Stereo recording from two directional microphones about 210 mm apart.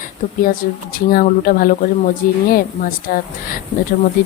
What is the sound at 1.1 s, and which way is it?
A woman's voice, 45° left (ahead or behind).